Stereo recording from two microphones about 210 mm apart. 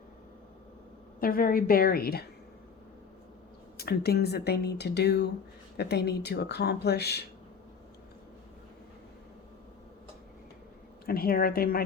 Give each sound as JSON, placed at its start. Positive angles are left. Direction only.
{"t": 1.2, "sound": "speech", "side_deg": 45}
{"t": 3.8, "sound": "speech", "side_deg": 50}
{"t": 11.0, "sound": "speech", "side_deg": 45}